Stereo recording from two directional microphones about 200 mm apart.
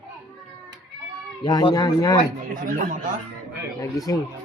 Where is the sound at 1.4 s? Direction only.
20° left (ahead or behind).